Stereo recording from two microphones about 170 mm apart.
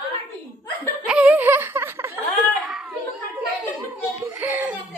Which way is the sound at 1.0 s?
5° right (ahead or behind).